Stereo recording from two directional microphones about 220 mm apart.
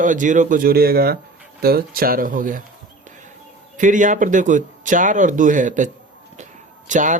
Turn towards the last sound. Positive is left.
turn(degrees=-35)  # may be behind; listen again after turning